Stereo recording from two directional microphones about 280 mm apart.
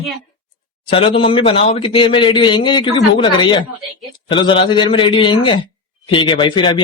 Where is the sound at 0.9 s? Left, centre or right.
Centre.